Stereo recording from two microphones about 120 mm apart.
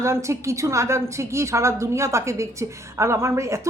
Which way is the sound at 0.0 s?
25° right (ahead or behind).